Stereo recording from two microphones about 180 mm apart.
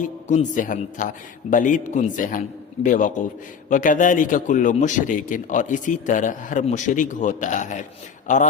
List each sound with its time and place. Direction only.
0.0 s a man's voice: 45° left (ahead or behind)